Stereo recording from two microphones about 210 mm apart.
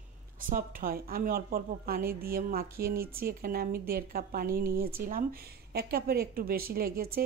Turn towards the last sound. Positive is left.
turn(degrees=-45)  # may be behind; listen again after turning